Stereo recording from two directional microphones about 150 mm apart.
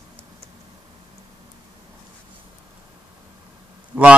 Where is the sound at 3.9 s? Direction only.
10° right (ahead or behind).